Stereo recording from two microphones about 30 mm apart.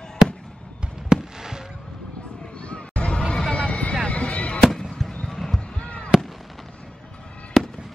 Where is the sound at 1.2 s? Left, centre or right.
Centre.